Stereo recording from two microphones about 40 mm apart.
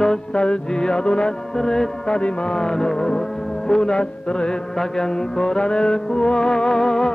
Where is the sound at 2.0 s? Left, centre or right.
Left.